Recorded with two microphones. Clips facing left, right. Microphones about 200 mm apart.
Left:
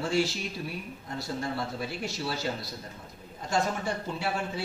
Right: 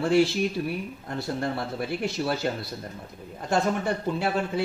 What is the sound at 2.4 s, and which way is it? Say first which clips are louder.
Speech: right 4 dB; 60° right (ahead or behind).